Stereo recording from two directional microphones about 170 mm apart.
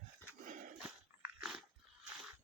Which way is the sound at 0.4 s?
50° right (ahead or behind).